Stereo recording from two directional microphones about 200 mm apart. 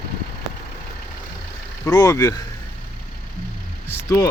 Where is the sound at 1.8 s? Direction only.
15° left (ahead or behind).